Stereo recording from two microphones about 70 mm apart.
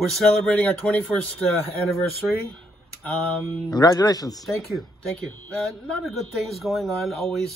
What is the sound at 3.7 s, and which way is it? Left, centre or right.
Speech, left.